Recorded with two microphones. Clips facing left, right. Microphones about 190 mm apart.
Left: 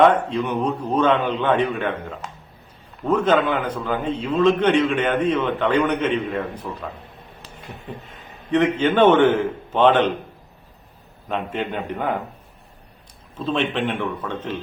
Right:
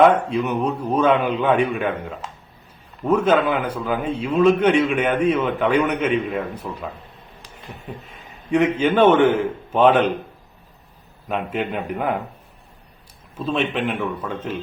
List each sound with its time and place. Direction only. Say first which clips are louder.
0.3 s a man's voice: right 1 dB; 5° right (ahead or behind)
8.8 s a man's voice: even; 10° right (ahead or behind)
11.3 s a man's voice: right 1 dB; 5° right (ahead or behind)
13.3 s a man's voice: even; 5° right (ahead or behind)